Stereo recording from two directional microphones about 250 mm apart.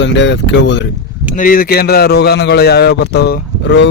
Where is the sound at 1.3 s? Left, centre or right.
Left.